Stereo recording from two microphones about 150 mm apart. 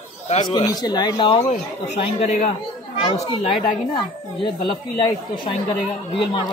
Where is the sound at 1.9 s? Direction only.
45° left (ahead or behind).